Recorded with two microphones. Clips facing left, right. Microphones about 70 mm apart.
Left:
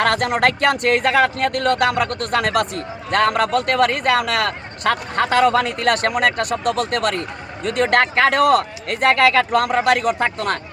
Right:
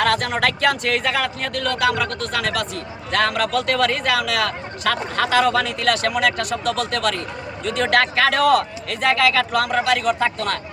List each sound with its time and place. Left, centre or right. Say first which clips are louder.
0.0 s a man's voice: left 2 dB; left